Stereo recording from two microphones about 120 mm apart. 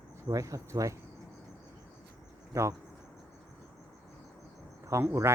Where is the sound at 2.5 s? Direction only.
25° right (ahead or behind).